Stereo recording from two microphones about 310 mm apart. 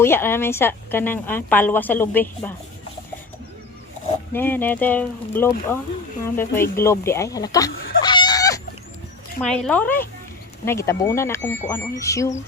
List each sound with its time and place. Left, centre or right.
0.0 s a woman's voice: centre
4.3 s a woman's voice: centre
8.0 s cat: centre
9.4 s a woman's voice: centre
11.3 s speech: left
11.7 s a woman's voice: centre